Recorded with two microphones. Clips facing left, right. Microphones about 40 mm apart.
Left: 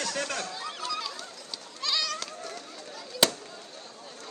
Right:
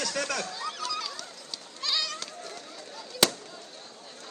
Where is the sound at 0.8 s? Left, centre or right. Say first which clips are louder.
Left 2 dB; left.